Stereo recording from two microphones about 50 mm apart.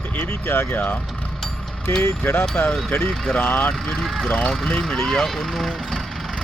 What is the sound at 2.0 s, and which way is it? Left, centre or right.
Speech, left.